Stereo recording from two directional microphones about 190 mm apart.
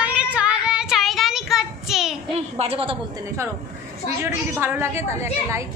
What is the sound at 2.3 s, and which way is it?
Speech, 30° right (ahead or behind).